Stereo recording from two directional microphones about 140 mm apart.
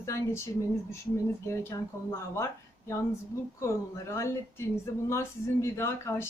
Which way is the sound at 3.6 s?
20° left (ahead or behind).